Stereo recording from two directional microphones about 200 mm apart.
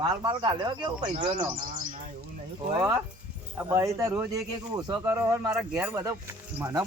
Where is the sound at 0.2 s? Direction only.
20° right (ahead or behind).